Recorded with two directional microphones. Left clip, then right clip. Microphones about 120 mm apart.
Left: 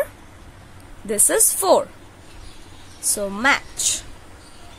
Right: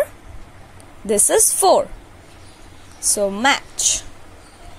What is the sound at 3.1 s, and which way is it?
Speech, 20° right (ahead or behind).